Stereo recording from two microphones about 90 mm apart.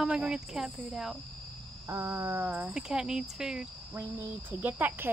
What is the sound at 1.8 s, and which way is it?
Speech, 30° right (ahead or behind).